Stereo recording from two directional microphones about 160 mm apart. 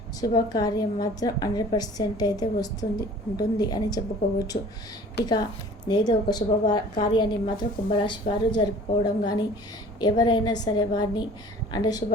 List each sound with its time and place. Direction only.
0.2 s a woman's voice: 25° left (ahead or behind)